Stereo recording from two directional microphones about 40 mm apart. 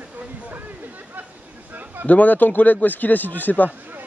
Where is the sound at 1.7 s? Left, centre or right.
Right.